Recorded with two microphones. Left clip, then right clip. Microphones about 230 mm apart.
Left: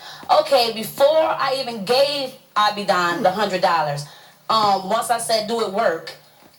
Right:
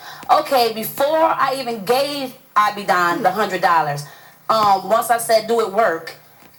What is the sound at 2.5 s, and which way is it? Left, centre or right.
Speech, right.